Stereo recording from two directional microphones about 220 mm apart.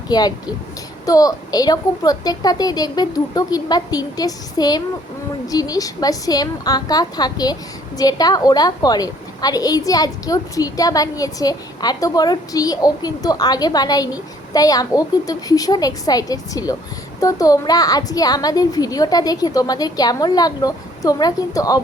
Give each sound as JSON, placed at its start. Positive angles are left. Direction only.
{"t": 0.1, "sound": "a woman's voice", "side_deg": 20}